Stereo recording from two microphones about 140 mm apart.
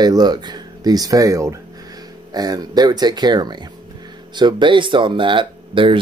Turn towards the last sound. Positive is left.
turn(degrees=-35)  # may be behind; listen again after turning